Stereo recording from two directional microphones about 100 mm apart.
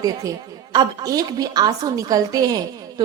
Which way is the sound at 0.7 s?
40° right (ahead or behind).